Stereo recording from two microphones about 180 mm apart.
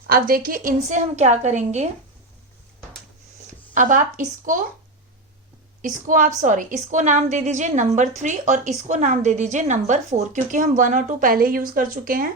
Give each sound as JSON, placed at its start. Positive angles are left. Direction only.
{"t": 0.1, "sound": "a woman's voice", "side_deg": -55}
{"t": 3.8, "sound": "a woman's voice", "side_deg": -45}
{"t": 5.8, "sound": "a woman's voice", "side_deg": -45}